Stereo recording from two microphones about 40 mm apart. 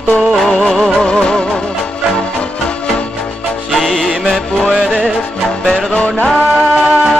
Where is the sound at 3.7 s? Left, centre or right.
Centre.